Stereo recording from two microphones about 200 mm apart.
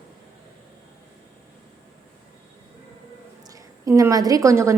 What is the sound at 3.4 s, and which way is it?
A woman's voice, 15° right (ahead or behind).